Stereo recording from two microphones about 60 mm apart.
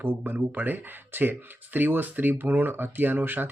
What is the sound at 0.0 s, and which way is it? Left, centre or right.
Speech, right.